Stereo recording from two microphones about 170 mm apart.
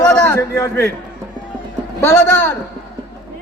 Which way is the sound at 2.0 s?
15° left (ahead or behind).